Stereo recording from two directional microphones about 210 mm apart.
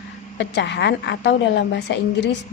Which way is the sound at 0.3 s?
55° left (ahead or behind).